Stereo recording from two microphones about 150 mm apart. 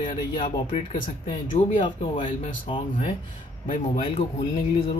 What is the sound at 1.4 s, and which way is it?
Speech, 60° left (ahead or behind).